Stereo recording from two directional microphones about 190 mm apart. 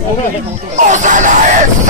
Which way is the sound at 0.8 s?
40° right (ahead or behind).